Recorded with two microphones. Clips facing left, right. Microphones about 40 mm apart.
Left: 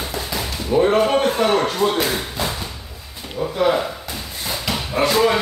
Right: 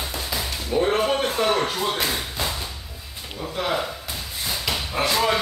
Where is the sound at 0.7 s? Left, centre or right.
Centre.